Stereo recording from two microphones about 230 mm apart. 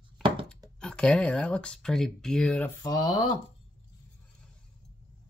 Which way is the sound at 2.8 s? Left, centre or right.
Centre.